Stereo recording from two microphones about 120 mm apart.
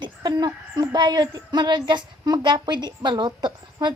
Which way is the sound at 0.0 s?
40° right (ahead or behind).